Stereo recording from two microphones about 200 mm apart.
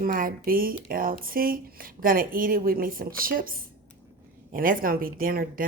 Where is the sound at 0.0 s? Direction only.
45° right (ahead or behind).